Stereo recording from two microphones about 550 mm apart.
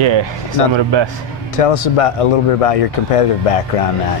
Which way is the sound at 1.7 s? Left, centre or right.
Left.